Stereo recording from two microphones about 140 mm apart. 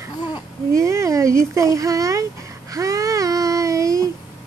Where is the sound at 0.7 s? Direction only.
20° right (ahead or behind).